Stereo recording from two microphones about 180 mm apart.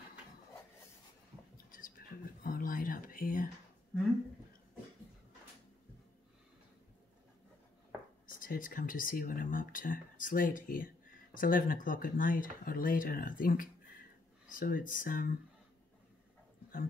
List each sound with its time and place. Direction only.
1.7 s whispering: 50° left (ahead or behind)
8.3 s speech: 50° left (ahead or behind)